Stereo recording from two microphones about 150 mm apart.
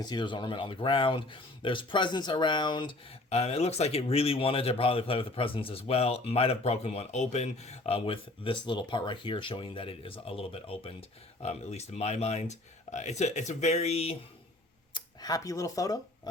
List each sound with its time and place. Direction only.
0.0 s speech: 30° left (ahead or behind)
3.2 s speech: 45° left (ahead or behind)
14.9 s speech: 25° left (ahead or behind)